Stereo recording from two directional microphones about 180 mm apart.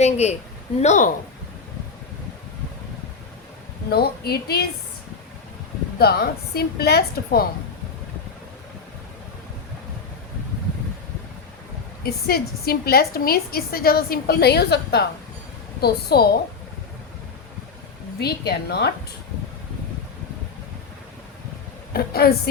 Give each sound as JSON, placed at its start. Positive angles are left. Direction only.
{"t": 0.0, "sound": "a woman's voice", "side_deg": 35}
{"t": 3.8, "sound": "a woman's voice", "side_deg": 60}
{"t": 6.0, "sound": "a woman's voice", "side_deg": 60}
{"t": 12.0, "sound": "a woman's voice", "side_deg": 55}
{"t": 18.2, "sound": "a woman's voice", "side_deg": 65}
{"t": 21.9, "sound": "a woman's voice", "side_deg": 60}